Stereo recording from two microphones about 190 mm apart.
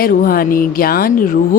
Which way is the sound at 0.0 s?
50° left (ahead or behind).